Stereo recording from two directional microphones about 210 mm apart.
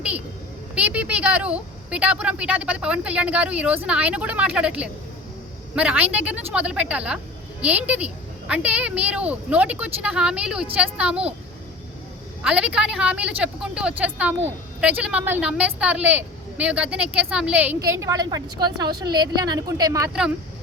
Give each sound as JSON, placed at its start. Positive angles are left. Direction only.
{"t": 0.8, "sound": "speech", "side_deg": -5}
{"t": 12.4, "sound": "speech", "side_deg": -5}